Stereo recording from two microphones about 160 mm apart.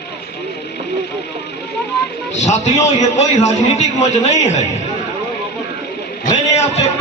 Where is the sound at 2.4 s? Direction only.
45° left (ahead or behind).